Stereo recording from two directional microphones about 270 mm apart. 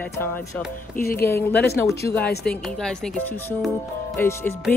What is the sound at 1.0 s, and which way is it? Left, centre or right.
Music, left.